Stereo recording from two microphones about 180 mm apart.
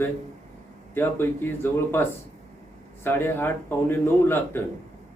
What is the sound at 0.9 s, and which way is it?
A man's voice, 10° left (ahead or behind).